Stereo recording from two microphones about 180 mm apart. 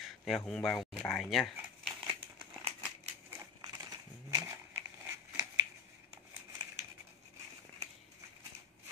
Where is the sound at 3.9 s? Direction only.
15° right (ahead or behind).